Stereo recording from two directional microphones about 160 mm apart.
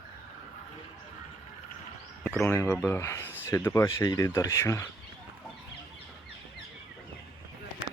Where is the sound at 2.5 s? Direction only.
15° left (ahead or behind).